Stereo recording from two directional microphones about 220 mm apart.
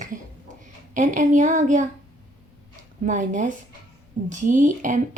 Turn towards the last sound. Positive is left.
turn(degrees=-35)  # may be behind; listen again after turning